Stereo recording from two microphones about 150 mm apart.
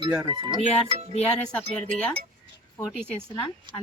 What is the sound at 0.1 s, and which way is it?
Speech, 25° right (ahead or behind).